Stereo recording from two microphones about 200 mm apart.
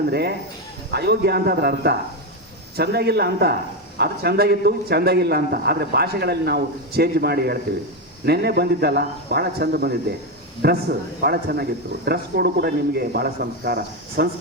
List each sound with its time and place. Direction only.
0.1 s a man's voice: 55° right (ahead or behind)